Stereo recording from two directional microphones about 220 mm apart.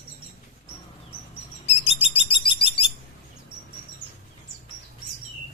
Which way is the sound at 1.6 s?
25° left (ahead or behind).